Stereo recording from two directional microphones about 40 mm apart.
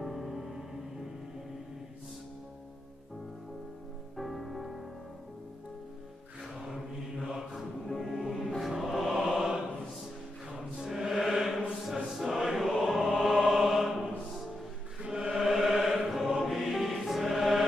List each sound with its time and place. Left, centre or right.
0.0 s music: centre
4.2 s music: centre
6.7 s music: centre
10.8 s mantra: centre
11.8 s chant: centre
13.1 s mantra: centre
15.0 s music: right
15.2 s music: centre